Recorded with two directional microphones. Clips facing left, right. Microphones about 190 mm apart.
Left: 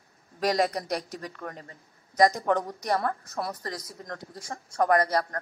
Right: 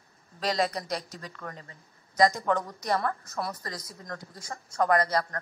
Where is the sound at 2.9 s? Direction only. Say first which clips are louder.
Left 1 dB; 35° left (ahead or behind).